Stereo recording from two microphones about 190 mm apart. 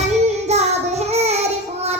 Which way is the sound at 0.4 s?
35° right (ahead or behind).